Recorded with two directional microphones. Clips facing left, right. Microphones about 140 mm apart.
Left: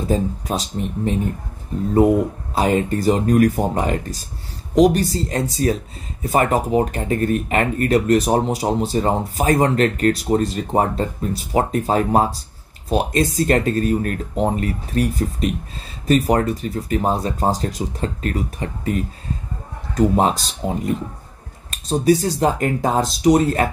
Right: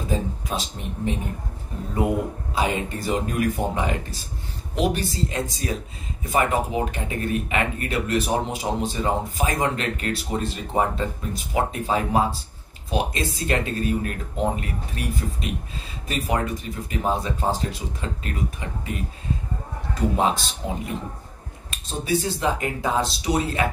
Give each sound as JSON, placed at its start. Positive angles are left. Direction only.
{"t": 0.1, "sound": "speech", "side_deg": 35}
{"t": 2.5, "sound": "speech", "side_deg": 40}
{"t": 20.0, "sound": "speech", "side_deg": 40}